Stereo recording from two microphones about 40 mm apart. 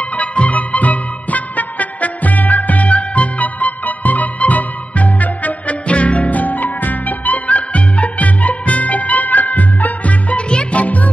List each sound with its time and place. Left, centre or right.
0.0 s music: left